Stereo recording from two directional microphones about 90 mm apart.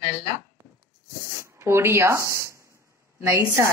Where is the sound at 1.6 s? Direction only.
30° right (ahead or behind).